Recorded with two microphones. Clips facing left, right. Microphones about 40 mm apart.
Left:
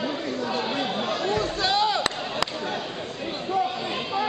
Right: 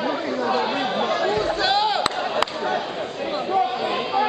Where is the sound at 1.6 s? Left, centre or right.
Right.